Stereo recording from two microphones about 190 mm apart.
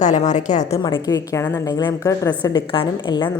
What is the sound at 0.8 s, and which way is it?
A woman's voice, 25° left (ahead or behind).